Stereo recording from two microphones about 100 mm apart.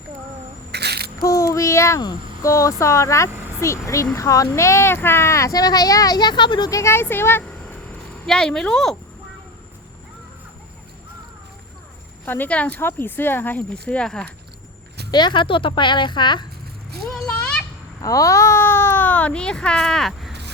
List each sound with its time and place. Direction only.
1.2 s a sound: 35° left (ahead or behind)
2.4 s speech: 30° left (ahead or behind); by 6.7 s 50° left (ahead or behind)
6.7 s speech: 30° left (ahead or behind)
8.3 s speech: 5° left (ahead or behind)
12.2 s speech: 20° left (ahead or behind)
15.1 s a woman's voice: 50° left (ahead or behind)
17.0 s children playing: centre (ahead or behind)
18.0 s speech: 35° left (ahead or behind); by 20.3 s 5° left (ahead or behind)